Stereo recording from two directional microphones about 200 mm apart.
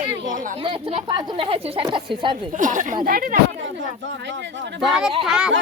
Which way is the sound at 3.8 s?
60° right (ahead or behind).